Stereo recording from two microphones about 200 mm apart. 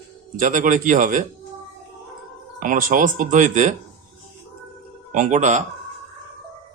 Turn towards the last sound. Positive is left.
turn(degrees=-35)  # may be behind; listen again after turning